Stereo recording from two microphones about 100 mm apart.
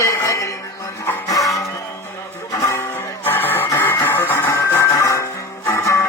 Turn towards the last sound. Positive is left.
turn(degrees=30)  # may be behind; listen again after turning